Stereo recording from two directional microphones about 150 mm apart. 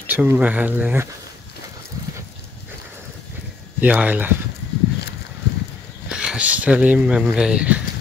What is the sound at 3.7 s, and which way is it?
Speech, 10° right (ahead or behind).